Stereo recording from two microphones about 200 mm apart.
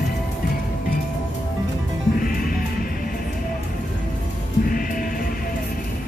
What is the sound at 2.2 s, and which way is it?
Music, 45° left (ahead or behind).